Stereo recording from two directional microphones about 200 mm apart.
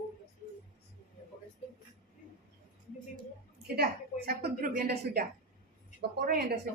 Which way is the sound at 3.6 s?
50° right (ahead or behind).